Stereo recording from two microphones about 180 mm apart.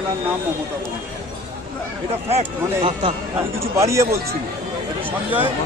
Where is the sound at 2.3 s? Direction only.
30° right (ahead or behind).